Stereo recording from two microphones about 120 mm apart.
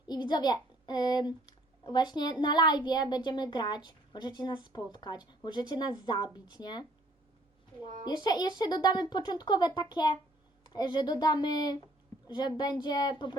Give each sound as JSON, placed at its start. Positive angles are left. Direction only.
{"t": 0.1, "sound": "a child's voice", "side_deg": 35}
{"t": 8.0, "sound": "a child's voice", "side_deg": 35}